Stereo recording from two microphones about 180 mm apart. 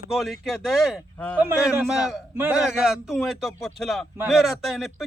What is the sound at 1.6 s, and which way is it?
A man's voice, 5° right (ahead or behind).